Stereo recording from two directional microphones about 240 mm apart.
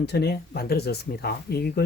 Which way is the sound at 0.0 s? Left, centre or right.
Left.